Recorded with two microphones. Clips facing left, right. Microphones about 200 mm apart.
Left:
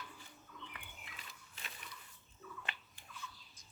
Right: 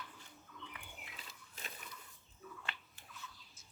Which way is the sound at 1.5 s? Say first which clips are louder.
Right 3 dB; 40° right (ahead or behind).